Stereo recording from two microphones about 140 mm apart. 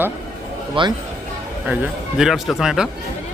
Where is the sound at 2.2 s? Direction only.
5° right (ahead or behind).